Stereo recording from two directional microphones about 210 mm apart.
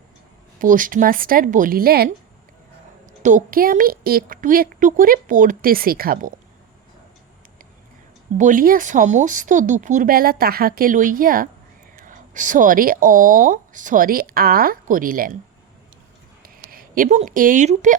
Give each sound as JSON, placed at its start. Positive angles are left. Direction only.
{"t": 0.6, "sound": "speech", "side_deg": -40}
{"t": 3.2, "sound": "a woman's voice", "side_deg": -40}
{"t": 8.4, "sound": "speech", "side_deg": -40}
{"t": 16.4, "sound": "speech", "side_deg": -45}